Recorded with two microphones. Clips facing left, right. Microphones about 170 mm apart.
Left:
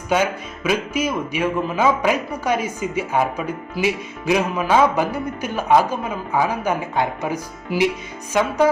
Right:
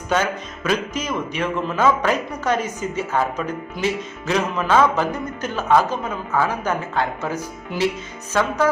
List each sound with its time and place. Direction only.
0.1 s speech: 10° left (ahead or behind)